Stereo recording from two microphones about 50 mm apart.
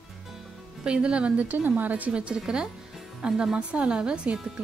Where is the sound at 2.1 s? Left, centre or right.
Centre.